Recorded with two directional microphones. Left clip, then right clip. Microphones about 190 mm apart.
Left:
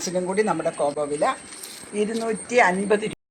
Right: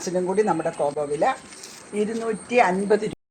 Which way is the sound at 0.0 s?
35° right (ahead or behind).